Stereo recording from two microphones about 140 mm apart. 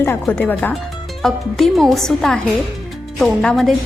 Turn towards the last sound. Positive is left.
turn(degrees=5)  # may be behind; listen again after turning